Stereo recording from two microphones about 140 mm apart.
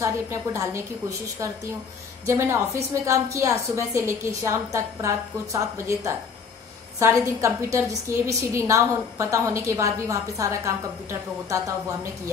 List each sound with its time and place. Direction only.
0.0 s a woman's voice: 20° right (ahead or behind)